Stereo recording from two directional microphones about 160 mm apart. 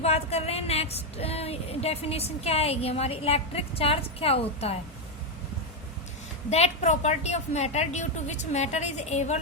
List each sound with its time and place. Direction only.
0.0 s speech: 40° left (ahead or behind)
6.5 s a woman's voice: 45° left (ahead or behind)